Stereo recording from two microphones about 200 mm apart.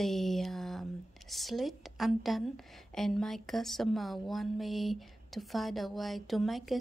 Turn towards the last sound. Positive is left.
turn(degrees=0)  # may be behind; listen again after turning